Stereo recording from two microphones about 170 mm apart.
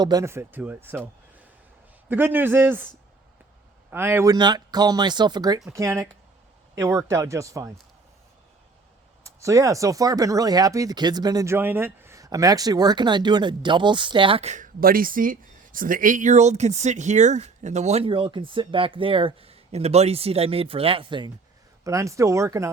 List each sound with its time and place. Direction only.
0.0 s speech: 20° right (ahead or behind)
2.0 s speech: 10° right (ahead or behind)
3.9 s speech: 15° right (ahead or behind)
9.2 s speech: 20° right (ahead or behind)
21.8 s speech: 20° right (ahead or behind)